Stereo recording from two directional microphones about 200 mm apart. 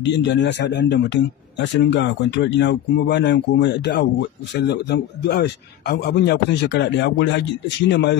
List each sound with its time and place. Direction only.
0.0 s a man's voice: 60° left (ahead or behind)